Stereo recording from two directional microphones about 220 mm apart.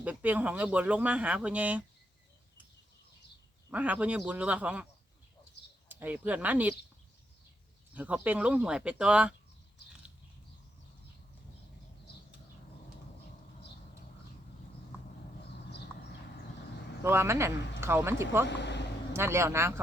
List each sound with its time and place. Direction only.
0.0 s speech: 5° right (ahead or behind)
3.7 s speech: 5° right (ahead or behind)
5.9 s speech: 10° right (ahead or behind)
7.9 s speech: 5° right (ahead or behind)
17.0 s speech: 10° right (ahead or behind)
18.4 s speech: 50° left (ahead or behind)
19.1 s speech: 10° right (ahead or behind)